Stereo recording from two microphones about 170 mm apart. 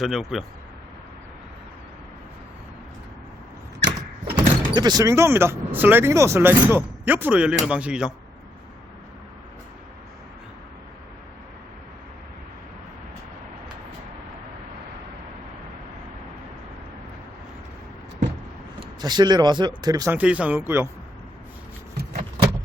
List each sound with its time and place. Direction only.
0.0 s speech: centre (ahead or behind)
4.4 s speech: 25° right (ahead or behind); by 8.1 s 5° right (ahead or behind)
18.9 s speech: 25° right (ahead or behind)
20.1 s speech: 5° right (ahead or behind)
22.0 s a sound: 70° right (ahead or behind)